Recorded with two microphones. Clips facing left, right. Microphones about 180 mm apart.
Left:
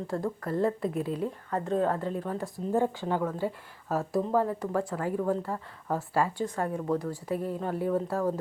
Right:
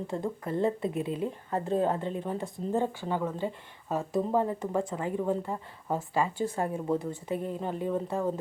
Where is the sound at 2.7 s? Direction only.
10° left (ahead or behind).